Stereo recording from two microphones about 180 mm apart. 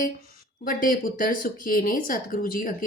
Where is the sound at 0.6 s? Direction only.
50° left (ahead or behind).